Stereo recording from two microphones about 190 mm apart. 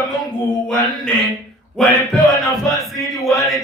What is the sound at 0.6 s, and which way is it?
Chant, 5° left (ahead or behind).